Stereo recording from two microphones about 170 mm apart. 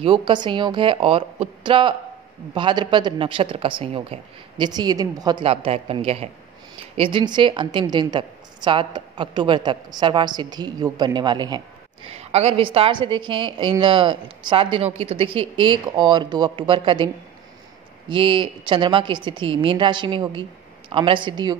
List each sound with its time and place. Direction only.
0.0 s a woman's voice: 30° right (ahead or behind)
5.4 s a woman's voice: 35° right (ahead or behind)
12.1 s a woman's voice: 40° right (ahead or behind)